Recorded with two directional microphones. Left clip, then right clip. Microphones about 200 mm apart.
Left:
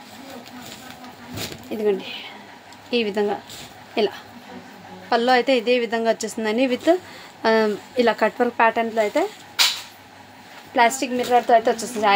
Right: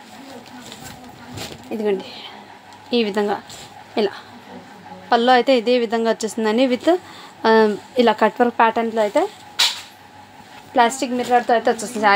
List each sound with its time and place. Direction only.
1.7 s a woman's voice: 20° right (ahead or behind)
2.9 s a woman's voice: 25° right (ahead or behind)
10.7 s a woman's voice: 25° right (ahead or behind)